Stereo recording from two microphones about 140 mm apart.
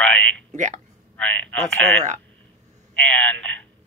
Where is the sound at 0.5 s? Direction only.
60° right (ahead or behind).